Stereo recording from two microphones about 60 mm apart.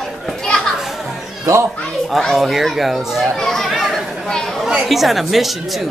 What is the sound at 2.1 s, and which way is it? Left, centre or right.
Speech, centre.